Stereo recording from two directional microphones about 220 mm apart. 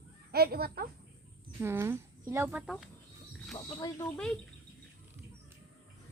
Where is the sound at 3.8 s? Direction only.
15° left (ahead or behind).